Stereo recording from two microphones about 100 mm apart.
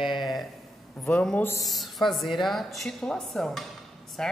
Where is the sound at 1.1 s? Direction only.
15° left (ahead or behind).